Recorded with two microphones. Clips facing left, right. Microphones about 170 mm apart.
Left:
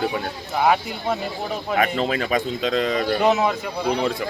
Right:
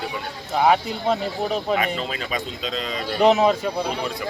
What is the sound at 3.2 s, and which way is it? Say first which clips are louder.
Speech: right 5 dB; 20° right (ahead or behind).